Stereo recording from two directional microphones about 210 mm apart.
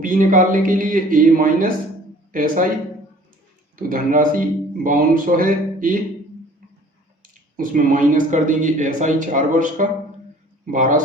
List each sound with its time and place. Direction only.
0.0 s speech: 40° right (ahead or behind)
3.8 s speech: 40° right (ahead or behind)
7.5 s speech: 40° right (ahead or behind)